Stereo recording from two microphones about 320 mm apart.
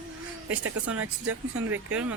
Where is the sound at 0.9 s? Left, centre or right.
Right.